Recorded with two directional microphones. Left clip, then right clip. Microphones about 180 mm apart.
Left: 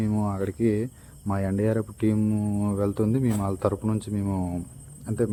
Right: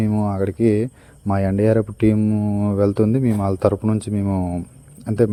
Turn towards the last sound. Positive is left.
turn(degrees=-35)  # may be behind; listen again after turning